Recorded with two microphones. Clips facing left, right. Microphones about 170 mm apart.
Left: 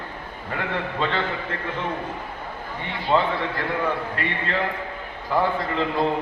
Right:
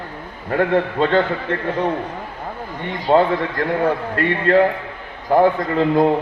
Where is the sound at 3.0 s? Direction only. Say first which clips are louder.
Right 6 dB; 40° right (ahead or behind).